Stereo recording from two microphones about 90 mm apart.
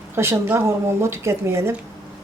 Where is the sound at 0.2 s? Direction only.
30° right (ahead or behind).